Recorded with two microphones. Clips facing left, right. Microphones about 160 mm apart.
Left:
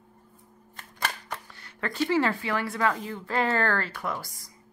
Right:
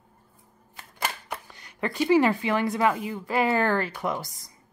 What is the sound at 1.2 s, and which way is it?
Speech, 15° right (ahead or behind).